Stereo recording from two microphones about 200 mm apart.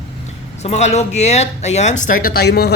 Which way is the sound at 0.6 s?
35° left (ahead or behind).